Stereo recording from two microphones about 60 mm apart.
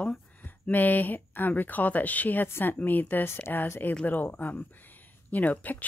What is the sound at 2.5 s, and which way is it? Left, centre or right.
Speech, left.